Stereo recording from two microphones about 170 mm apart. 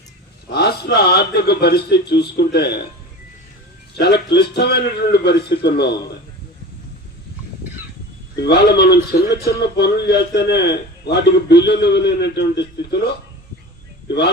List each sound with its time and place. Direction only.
0.5 s a man's voice: 70° left (ahead or behind)
3.9 s a man's voice: 75° left (ahead or behind)
8.4 s a man's voice: 75° left (ahead or behind)